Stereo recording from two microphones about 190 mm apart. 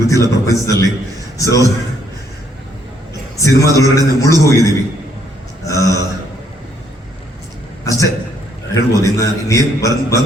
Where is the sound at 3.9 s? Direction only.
15° left (ahead or behind).